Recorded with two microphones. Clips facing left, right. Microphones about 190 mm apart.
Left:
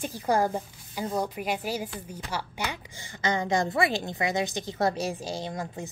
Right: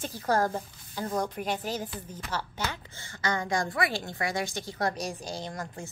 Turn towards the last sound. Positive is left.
turn(degrees=20)  # may be behind; listen again after turning